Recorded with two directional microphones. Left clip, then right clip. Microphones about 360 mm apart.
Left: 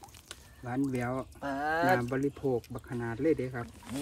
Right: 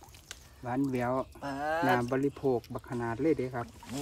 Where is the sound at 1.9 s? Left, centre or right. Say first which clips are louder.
Right 1 dB; centre.